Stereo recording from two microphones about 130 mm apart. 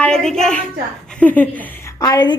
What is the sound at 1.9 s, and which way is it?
Speech, 30° left (ahead or behind).